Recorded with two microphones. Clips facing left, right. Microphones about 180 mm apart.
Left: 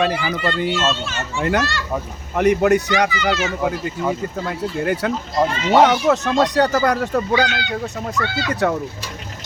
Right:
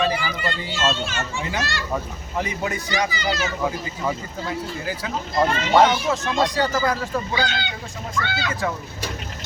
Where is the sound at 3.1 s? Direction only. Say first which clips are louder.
Left 4 dB; 35° right (ahead or behind).